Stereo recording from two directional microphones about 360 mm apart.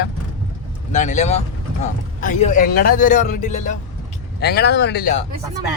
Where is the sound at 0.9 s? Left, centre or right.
Centre.